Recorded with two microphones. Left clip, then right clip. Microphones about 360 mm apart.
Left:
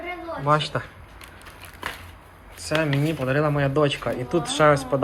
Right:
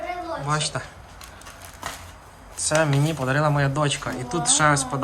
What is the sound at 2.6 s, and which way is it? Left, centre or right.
Speech, centre.